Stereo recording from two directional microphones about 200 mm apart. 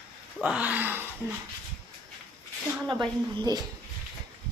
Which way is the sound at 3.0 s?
20° right (ahead or behind).